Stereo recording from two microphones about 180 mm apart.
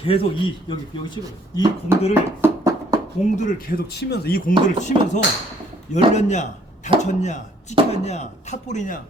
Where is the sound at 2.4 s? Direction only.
15° right (ahead or behind).